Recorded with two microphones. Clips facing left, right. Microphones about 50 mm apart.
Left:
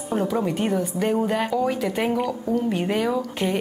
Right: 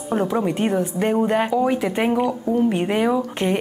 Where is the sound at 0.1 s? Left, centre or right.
Centre.